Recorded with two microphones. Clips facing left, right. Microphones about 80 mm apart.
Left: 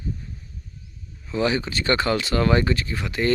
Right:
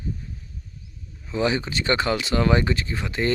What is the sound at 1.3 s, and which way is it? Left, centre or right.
Speech, right.